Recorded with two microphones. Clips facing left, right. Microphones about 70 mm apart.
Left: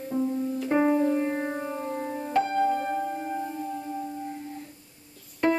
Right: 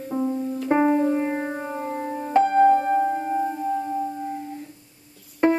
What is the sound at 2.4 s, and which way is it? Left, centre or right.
Music, right.